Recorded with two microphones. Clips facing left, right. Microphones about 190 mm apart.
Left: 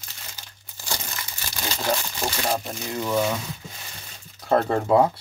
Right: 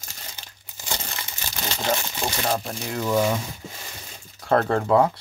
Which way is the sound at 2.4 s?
Centre (ahead or behind).